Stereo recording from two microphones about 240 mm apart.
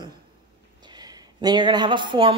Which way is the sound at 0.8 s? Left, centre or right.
Centre.